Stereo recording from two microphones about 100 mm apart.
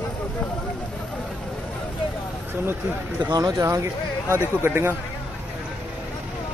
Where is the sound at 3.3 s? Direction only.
35° right (ahead or behind).